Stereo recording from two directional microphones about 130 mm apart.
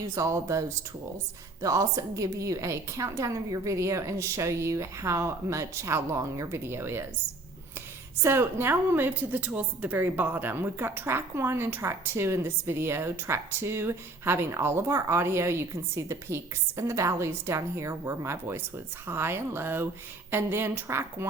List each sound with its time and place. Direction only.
0.0 s a woman's voice: 25° right (ahead or behind)
8.2 s a woman's voice: 20° right (ahead or behind)